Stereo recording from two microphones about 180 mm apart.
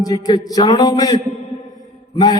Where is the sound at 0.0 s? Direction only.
20° left (ahead or behind).